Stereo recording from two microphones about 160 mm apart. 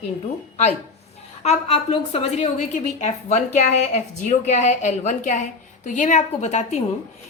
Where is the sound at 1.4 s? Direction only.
40° left (ahead or behind).